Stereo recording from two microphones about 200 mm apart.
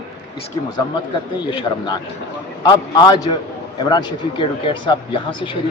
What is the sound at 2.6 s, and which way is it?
Speech, 20° left (ahead or behind).